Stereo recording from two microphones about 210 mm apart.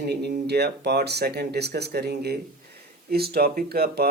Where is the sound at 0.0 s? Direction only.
50° right (ahead or behind).